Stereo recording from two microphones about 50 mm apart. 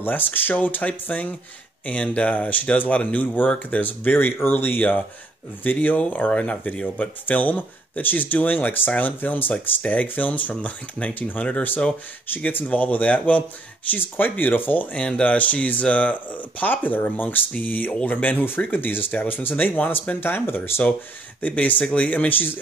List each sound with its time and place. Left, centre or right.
0.0 s speech: left
12.4 s speech: left
15.0 s speech: centre
15.2 s speech: left
21.4 s speech: left